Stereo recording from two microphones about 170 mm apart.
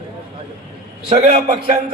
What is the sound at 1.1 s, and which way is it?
Speech, 35° right (ahead or behind).